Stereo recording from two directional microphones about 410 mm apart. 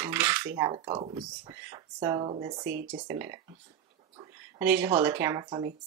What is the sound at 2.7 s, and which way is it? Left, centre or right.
Speech, right.